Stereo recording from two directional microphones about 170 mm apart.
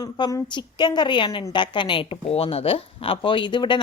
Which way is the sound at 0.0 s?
20° left (ahead or behind).